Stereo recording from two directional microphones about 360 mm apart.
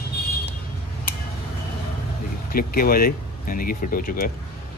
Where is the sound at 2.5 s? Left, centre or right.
Left.